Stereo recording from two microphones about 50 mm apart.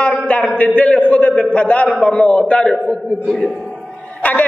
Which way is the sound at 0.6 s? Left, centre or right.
Left.